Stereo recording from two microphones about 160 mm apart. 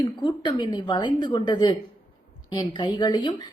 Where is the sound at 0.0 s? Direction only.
30° left (ahead or behind).